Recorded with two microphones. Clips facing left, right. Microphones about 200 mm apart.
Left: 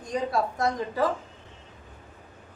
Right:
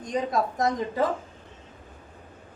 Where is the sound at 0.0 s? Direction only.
20° right (ahead or behind).